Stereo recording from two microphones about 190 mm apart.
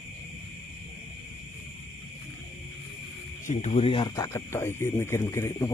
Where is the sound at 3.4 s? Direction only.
35° left (ahead or behind).